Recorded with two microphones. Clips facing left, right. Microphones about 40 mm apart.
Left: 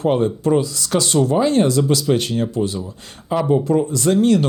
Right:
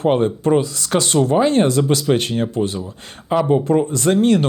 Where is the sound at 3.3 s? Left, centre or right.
Right.